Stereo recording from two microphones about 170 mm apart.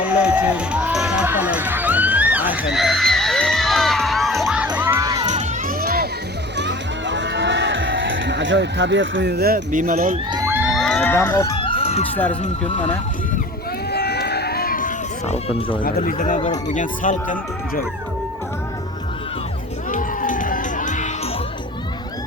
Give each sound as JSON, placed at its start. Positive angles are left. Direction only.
{"t": 0.0, "sound": "music", "side_deg": -5}
{"t": 2.7, "sound": "crowd", "side_deg": 0}
{"t": 5.2, "sound": "crowd", "side_deg": -45}
{"t": 6.6, "sound": "music", "side_deg": -90}
{"t": 10.3, "sound": "crowd", "side_deg": -15}
{"t": 11.1, "sound": "speech", "side_deg": 10}
{"t": 11.6, "sound": "a sound", "side_deg": 35}
{"t": 12.1, "sound": "speech", "side_deg": 10}
{"t": 12.4, "sound": "speech", "side_deg": 45}
{"t": 13.9, "sound": "run", "side_deg": 75}
{"t": 15.8, "sound": "speech", "side_deg": 50}
{"t": 19.9, "sound": "crowd", "side_deg": 50}